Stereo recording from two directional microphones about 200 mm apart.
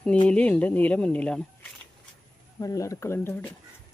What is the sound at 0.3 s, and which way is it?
Speech, 5° left (ahead or behind).